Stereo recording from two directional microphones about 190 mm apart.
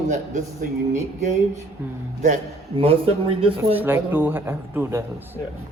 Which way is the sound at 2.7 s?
30° right (ahead or behind).